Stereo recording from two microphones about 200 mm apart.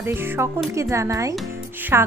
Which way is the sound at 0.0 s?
10° right (ahead or behind).